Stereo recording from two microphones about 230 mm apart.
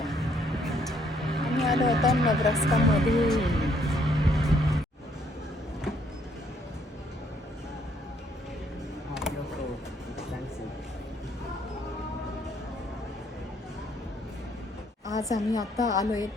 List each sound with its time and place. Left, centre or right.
0.0 s music: centre
15.2 s a woman's voice: centre